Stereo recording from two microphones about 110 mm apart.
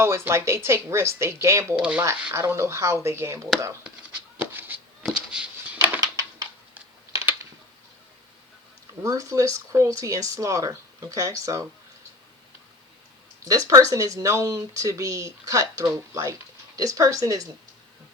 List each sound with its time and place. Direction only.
0.0 s speech: 25° right (ahead or behind)
1.8 s speech: 10° right (ahead or behind)
2.3 s speech: 25° right (ahead or behind)
4.1 s a sound: 15° right (ahead or behind)
6.0 s a sound: 35° right (ahead or behind)
9.0 s speech: 30° right (ahead or behind)
13.4 s speech: 30° right (ahead or behind)